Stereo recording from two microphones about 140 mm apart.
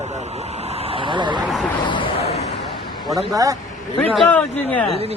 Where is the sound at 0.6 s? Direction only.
50° right (ahead or behind).